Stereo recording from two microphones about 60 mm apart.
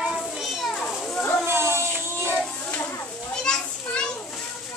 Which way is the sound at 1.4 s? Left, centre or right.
Right.